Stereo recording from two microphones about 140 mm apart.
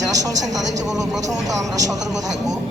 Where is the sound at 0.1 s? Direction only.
25° right (ahead or behind).